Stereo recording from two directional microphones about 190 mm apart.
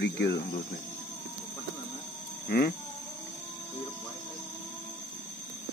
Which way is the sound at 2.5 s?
50° left (ahead or behind).